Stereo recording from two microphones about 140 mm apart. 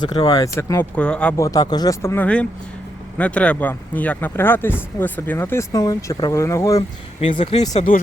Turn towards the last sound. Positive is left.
turn(degrees=75)  # may be behind; listen again after turning